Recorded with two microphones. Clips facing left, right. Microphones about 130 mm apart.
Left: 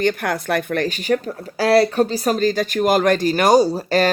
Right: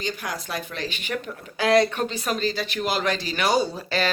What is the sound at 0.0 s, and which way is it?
Speech, 60° left (ahead or behind).